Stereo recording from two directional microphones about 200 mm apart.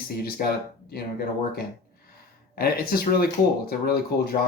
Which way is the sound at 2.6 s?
50° left (ahead or behind).